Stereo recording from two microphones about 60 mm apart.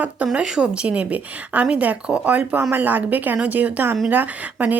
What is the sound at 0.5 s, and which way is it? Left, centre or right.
Speech, centre.